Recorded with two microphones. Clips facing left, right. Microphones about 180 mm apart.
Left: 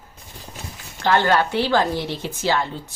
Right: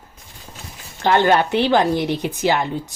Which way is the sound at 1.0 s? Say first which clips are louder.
Right 3 dB; 20° right (ahead or behind).